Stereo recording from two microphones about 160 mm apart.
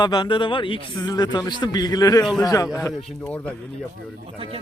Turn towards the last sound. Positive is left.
turn(degrees=10)  # may be behind; listen again after turning